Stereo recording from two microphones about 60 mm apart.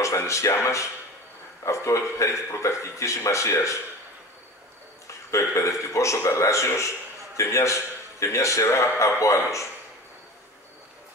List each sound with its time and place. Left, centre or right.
0.0 s speech: left
5.3 s speech: left